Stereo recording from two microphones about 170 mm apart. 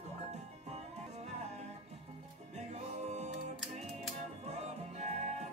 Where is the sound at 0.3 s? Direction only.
40° right (ahead or behind).